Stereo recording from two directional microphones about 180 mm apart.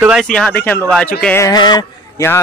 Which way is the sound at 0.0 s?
Centre (ahead or behind).